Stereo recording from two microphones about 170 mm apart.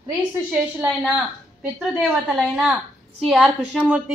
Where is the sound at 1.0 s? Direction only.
5° right (ahead or behind).